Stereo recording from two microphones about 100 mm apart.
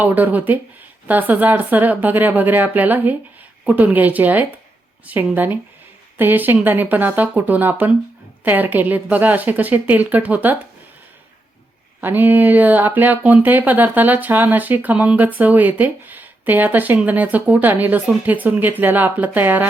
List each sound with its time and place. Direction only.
0.0 s speech: 15° right (ahead or behind)
11.9 s speech: 20° right (ahead or behind)